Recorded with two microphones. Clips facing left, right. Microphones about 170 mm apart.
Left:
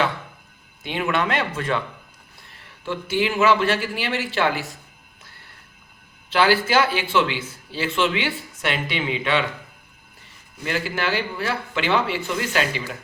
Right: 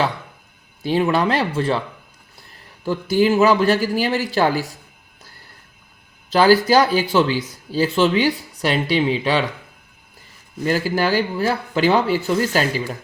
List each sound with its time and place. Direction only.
0.8 s speech: 35° right (ahead or behind)
2.8 s speech: 40° right (ahead or behind)
6.3 s speech: 40° right (ahead or behind)
10.6 s speech: 40° right (ahead or behind)